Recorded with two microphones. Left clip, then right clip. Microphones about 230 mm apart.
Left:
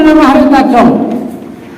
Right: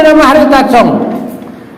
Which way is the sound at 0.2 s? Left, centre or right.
Right.